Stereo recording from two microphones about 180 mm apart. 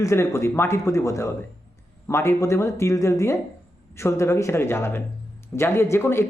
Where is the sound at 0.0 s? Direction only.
15° left (ahead or behind).